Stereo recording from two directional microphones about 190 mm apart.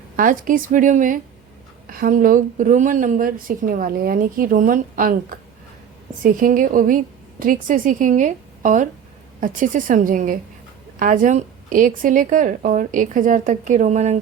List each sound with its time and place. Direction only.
0.2 s speech: 45° right (ahead or behind)